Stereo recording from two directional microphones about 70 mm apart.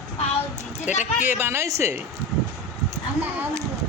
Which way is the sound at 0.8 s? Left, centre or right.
Right.